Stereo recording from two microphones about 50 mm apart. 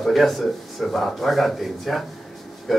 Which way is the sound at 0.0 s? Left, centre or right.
Centre.